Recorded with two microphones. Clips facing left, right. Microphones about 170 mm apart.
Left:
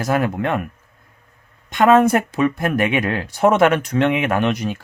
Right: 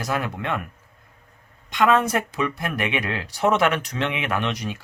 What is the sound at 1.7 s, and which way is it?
Speech, 50° left (ahead or behind).